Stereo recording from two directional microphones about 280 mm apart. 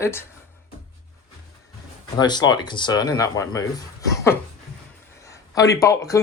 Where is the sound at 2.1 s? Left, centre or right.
Centre.